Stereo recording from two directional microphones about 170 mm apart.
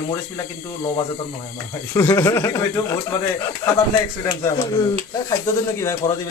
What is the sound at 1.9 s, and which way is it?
Speech, 15° left (ahead or behind).